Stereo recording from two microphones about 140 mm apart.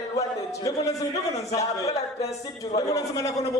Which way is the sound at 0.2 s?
25° left (ahead or behind).